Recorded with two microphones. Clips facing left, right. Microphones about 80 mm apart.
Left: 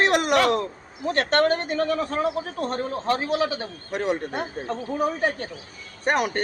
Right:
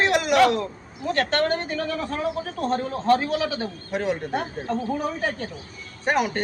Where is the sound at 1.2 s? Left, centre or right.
Left.